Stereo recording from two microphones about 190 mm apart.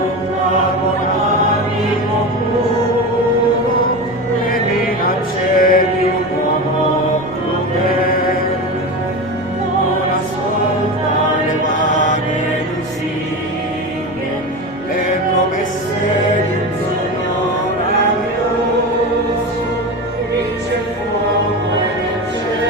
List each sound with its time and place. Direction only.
5.5 s mantra: 50° left (ahead or behind)
7.9 s mantra: 50° left (ahead or behind)